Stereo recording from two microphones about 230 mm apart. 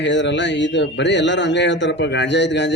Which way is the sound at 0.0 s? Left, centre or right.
Left.